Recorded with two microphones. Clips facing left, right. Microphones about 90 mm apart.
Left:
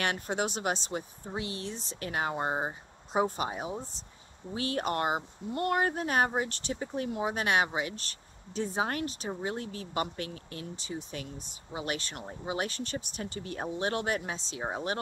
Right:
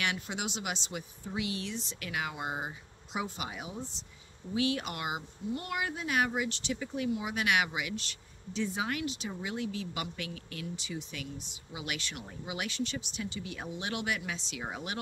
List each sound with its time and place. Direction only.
0.0 s speech: 40° left (ahead or behind)